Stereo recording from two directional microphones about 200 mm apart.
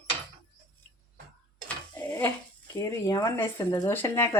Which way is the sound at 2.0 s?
10° left (ahead or behind).